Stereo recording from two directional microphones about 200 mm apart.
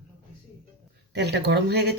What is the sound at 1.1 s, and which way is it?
Speech, 55° right (ahead or behind).